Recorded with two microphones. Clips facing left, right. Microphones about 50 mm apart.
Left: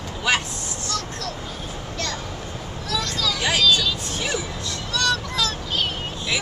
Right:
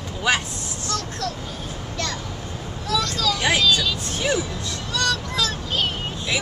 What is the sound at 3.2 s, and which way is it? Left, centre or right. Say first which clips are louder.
Speech: right 2 dB; right.